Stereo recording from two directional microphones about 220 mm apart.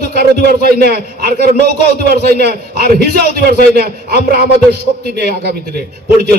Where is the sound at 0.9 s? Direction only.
45° right (ahead or behind).